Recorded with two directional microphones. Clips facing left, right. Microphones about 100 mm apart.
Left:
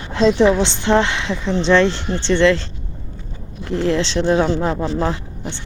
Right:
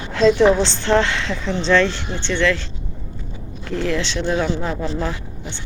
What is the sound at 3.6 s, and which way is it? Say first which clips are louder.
Speech: left 4 dB; 25° left (ahead or behind).